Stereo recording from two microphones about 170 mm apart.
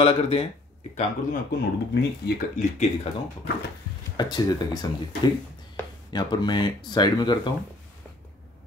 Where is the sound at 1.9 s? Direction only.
70° left (ahead or behind).